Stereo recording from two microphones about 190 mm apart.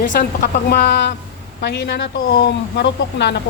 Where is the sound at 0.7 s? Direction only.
60° left (ahead or behind).